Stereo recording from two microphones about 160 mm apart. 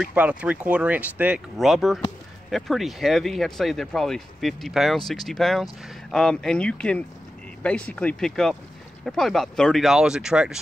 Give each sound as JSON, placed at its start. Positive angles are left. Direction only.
{"t": 0.0, "sound": "speech", "side_deg": -10}